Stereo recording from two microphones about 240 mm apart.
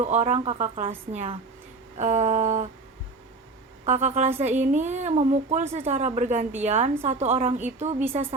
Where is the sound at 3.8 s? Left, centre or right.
Right.